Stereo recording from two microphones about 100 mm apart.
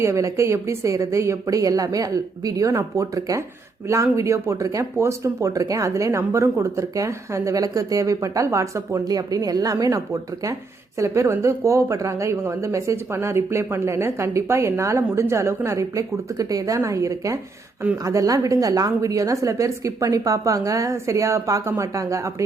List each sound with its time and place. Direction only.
0.0 s speech: 30° right (ahead or behind)